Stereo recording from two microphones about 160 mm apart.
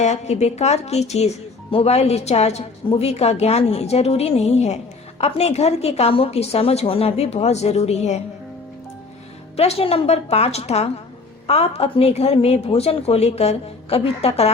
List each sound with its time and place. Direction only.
0.0 s a woman's voice: 45° left (ahead or behind)
9.6 s a woman's voice: 40° left (ahead or behind)